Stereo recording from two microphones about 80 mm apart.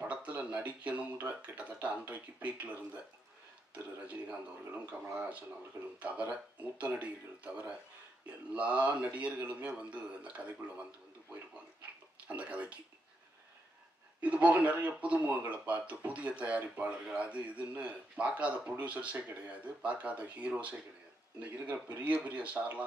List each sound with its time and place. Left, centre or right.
0.0 s a sound: centre
1.2 s speech: centre
5.9 s speech: centre
12.3 s speech: centre
14.2 s speech: centre